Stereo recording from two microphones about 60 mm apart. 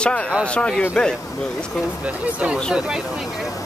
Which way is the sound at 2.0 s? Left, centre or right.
Right.